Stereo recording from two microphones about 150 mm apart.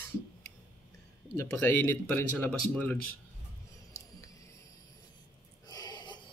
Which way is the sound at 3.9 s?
20° left (ahead or behind).